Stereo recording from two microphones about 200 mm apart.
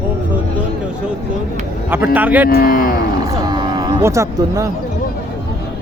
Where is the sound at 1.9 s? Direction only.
10° right (ahead or behind).